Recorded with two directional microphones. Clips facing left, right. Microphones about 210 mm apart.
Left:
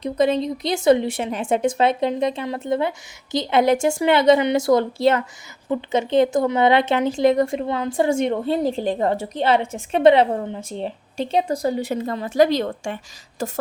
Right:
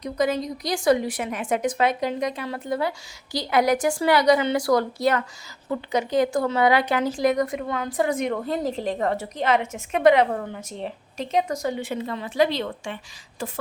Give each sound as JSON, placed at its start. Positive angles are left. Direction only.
{"t": 0.0, "sound": "a woman's voice", "side_deg": 25}